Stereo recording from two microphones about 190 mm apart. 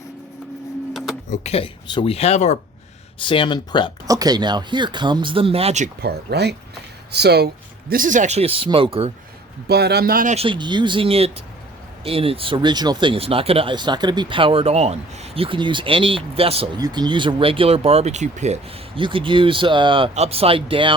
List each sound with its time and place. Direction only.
1.3 s speech: 35° left (ahead or behind)
3.2 s speech: 25° left (ahead or behind)
4.0 s speech: 20° right (ahead or behind); by 5.9 s 35° right (ahead or behind)
6.0 s speech: 60° right (ahead or behind); by 9.1 s 30° right (ahead or behind)
9.6 s speech: 60° right (ahead or behind)
10.3 s speech: 30° right (ahead or behind)